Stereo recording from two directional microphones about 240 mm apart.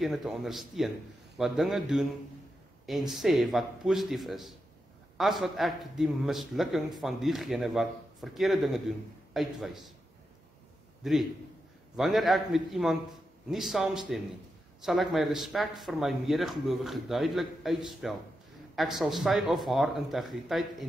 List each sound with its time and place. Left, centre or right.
0.0 s a man's voice: centre
11.0 s a man's voice: centre